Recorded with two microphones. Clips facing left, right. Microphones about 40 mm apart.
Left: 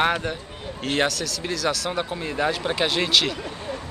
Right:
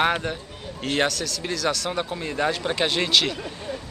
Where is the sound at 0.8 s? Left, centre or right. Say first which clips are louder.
Even; centre.